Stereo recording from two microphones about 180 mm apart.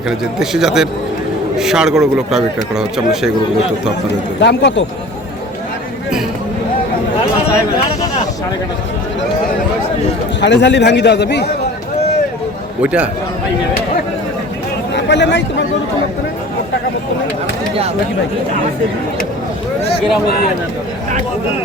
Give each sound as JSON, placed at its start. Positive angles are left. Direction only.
{"t": 0.1, "sound": "speech", "side_deg": 0}
{"t": 4.4, "sound": "a man's voice", "side_deg": 75}
{"t": 10.4, "sound": "a man's voice", "side_deg": 75}
{"t": 12.8, "sound": "speech", "side_deg": -5}
{"t": 14.9, "sound": "speech", "side_deg": 75}